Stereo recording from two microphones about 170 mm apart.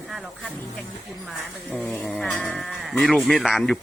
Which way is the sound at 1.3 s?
Centre (ahead or behind).